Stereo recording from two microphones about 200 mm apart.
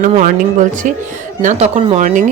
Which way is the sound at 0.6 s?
40° right (ahead or behind).